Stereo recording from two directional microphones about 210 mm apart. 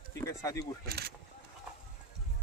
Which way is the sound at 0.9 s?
50° right (ahead or behind).